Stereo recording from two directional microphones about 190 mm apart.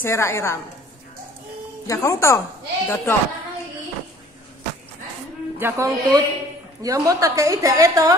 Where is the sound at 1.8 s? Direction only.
15° left (ahead or behind).